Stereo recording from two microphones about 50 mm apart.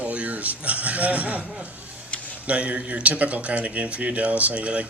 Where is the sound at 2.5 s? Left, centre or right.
Right.